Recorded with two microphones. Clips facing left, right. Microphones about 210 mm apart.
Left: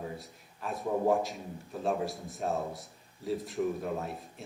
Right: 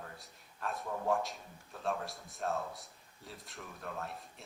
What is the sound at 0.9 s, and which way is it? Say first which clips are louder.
Speech: left 9 dB; 20° left (ahead or behind).